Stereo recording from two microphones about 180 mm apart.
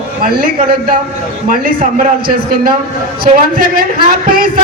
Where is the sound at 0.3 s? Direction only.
55° right (ahead or behind).